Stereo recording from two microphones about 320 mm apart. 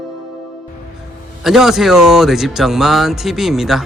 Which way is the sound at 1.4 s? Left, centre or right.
Centre.